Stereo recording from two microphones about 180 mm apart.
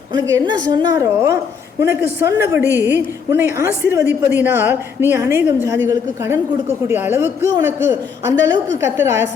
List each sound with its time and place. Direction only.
0.1 s a woman's voice: 20° right (ahead or behind)